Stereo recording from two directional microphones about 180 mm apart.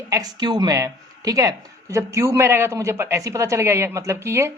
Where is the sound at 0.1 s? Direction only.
20° right (ahead or behind).